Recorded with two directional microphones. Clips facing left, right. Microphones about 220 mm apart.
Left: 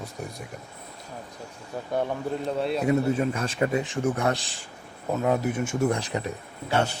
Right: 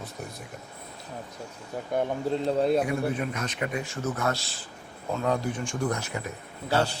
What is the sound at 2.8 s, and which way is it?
Speech, 25° left (ahead or behind).